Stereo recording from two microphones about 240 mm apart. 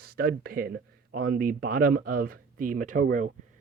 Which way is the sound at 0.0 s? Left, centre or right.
Right.